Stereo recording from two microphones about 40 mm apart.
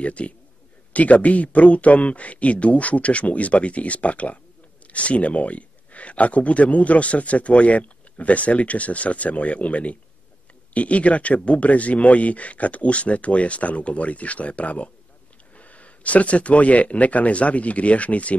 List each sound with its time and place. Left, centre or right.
0.0 s speech: left